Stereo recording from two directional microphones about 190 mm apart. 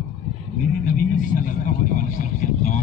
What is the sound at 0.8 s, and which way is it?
Speech, 45° left (ahead or behind).